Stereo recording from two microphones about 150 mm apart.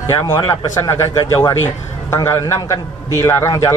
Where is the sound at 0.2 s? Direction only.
25° left (ahead or behind).